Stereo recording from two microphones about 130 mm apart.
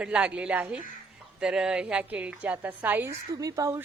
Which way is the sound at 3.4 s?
25° right (ahead or behind).